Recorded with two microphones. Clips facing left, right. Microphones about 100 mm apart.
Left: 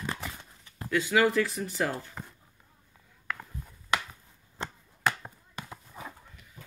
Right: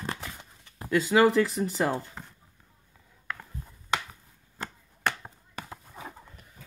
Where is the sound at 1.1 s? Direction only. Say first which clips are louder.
Right 4 dB; 30° right (ahead or behind).